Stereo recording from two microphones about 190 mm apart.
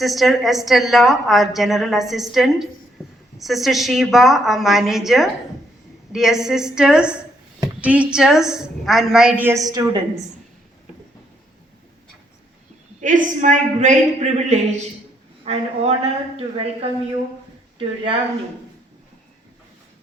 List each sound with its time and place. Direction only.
0.0 s a woman's voice: centre (ahead or behind); by 10.0 s 20° right (ahead or behind)
13.0 s a man's voice: 40° right (ahead or behind)